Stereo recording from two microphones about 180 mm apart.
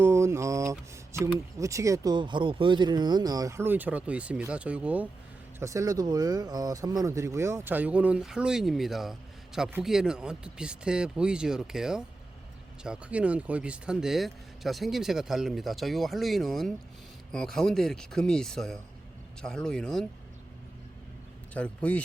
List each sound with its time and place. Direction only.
0.0 s mantra: 15° right (ahead or behind)
1.2 s speech: 15° right (ahead or behind); by 20.1 s 5° left (ahead or behind)
21.5 s speech: 5° left (ahead or behind)